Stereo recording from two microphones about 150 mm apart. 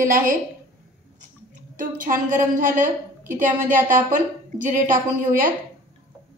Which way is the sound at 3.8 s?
60° right (ahead or behind).